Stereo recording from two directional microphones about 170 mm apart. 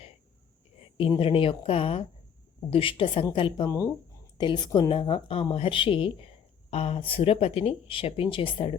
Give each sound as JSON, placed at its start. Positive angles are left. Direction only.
{"t": 0.9, "sound": "speech", "side_deg": 30}
{"t": 3.7, "sound": "speech", "side_deg": 20}